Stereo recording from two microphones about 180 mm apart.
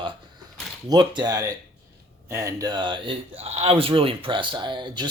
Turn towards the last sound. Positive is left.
turn(degrees=-25)  # may be behind; listen again after turning